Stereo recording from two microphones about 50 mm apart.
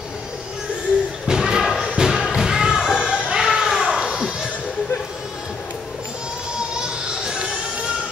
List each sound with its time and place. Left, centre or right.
1.2 s a sound: centre
1.6 s thump: centre
1.9 s thump: centre
2.3 s music: centre
6.7 s music: centre